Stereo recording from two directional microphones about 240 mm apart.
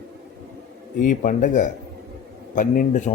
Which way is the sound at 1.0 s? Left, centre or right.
Left.